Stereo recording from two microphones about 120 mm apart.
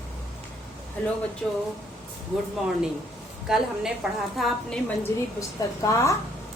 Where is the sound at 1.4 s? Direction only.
10° left (ahead or behind).